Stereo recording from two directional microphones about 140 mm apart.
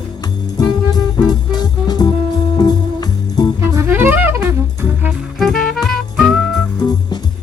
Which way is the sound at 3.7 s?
20° right (ahead or behind).